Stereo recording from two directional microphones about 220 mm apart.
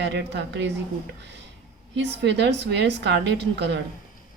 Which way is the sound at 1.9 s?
50° right (ahead or behind).